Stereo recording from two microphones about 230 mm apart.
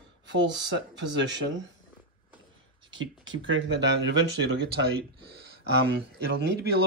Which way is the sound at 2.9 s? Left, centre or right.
Right.